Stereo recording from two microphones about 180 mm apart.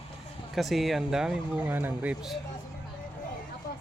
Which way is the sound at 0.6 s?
Centre (ahead or behind).